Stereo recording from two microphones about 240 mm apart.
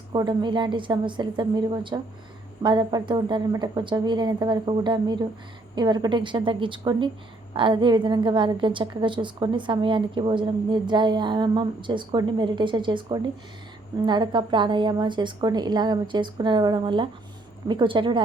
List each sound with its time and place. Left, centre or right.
0.1 s a woman's voice: centre